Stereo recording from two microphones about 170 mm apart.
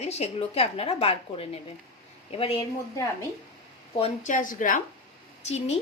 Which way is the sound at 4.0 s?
45° left (ahead or behind).